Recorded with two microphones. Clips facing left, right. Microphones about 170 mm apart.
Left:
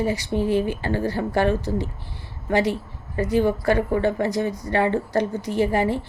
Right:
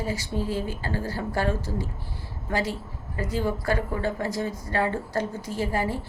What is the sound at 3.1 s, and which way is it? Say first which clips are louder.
A woman's voice: left 7 dB; 20° left (ahead or behind).